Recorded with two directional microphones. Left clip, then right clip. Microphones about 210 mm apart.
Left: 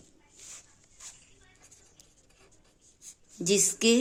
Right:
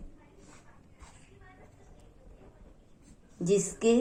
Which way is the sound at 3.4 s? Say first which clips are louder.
Left 1 dB; 55° left (ahead or behind).